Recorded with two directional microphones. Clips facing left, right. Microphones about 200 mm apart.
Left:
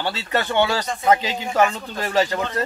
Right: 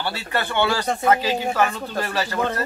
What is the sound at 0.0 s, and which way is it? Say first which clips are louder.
Speech: left 2 dB; 20° left (ahead or behind).